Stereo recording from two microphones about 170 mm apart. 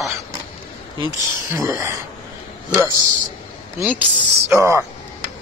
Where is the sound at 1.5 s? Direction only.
15° right (ahead or behind).